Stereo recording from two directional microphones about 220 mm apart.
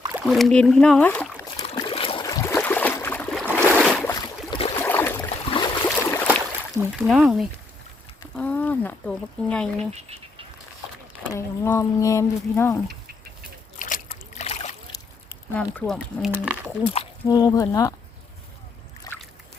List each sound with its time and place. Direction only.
0.1 s speech: 5° right (ahead or behind)
1.6 s a sound: 20° left (ahead or behind); by 4.1 s 5° left (ahead or behind)
4.1 s boat: 25° left (ahead or behind)
4.8 s boat: 10° left (ahead or behind)
6.8 s a sound: 10° right (ahead or behind)
7.1 s speech: centre (ahead or behind)
9.9 s frog: 25° right (ahead or behind)
11.3 s speech: 10° left (ahead or behind)
13.7 s a sound: 35° left (ahead or behind)
14.1 s boat: 30° left (ahead or behind)
15.5 s speech: 5° left (ahead or behind)
16.8 s speech: 30° left (ahead or behind)
17.2 s speech: 15° left (ahead or behind)
19.0 s boat: 10° left (ahead or behind)